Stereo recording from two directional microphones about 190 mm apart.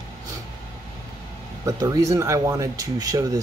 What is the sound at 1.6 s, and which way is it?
Speech, 20° right (ahead or behind).